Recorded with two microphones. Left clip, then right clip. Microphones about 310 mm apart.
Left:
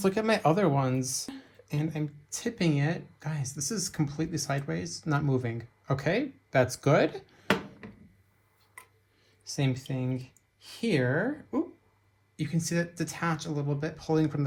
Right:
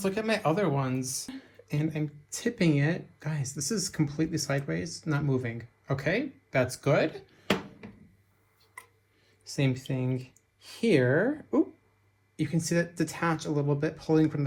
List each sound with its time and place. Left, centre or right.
0.0 s speech: left
1.3 s speech: centre
9.4 s speech: centre